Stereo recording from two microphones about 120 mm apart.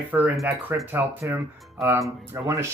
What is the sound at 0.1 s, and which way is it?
Speech, 15° right (ahead or behind).